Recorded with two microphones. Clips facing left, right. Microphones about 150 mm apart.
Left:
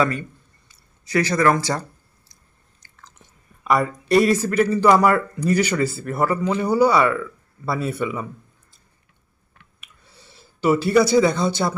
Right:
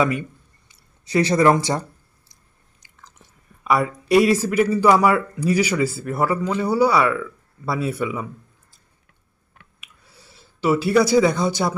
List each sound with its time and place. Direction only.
0.0 s a man's voice: 15° right (ahead or behind)
0.7 s speech: 25° right (ahead or behind)
2.8 s chewing: 15° right (ahead or behind)
3.6 s speech: 5° right (ahead or behind)
9.8 s a sound: 5° right (ahead or behind)